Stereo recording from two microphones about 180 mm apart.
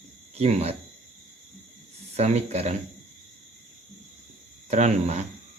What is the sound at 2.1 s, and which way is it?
Speech, 35° right (ahead or behind).